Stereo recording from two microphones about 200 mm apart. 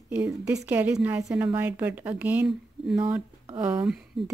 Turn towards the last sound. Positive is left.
turn(degrees=-5)  # may be behind; listen again after turning